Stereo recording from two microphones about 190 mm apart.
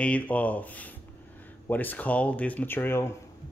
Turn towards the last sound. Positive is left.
turn(degrees=10)  # may be behind; listen again after turning